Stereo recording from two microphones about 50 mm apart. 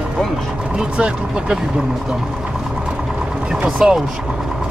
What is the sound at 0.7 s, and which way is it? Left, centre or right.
Speech, centre.